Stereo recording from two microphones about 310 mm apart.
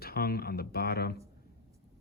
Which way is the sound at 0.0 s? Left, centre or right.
Left.